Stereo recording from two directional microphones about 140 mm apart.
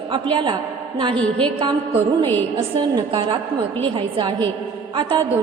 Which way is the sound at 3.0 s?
30° right (ahead or behind).